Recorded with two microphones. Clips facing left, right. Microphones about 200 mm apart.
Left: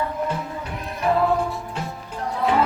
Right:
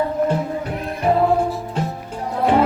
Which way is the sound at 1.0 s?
30° right (ahead or behind).